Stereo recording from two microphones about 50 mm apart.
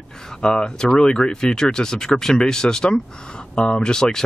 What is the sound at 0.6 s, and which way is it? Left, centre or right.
Speech, centre.